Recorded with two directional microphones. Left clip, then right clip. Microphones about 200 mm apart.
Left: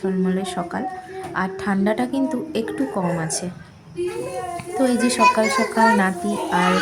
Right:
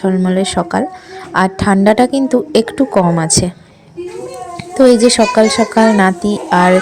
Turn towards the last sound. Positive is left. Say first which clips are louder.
# right 8 dB
turn(degrees=-35)  # may be behind; listen again after turning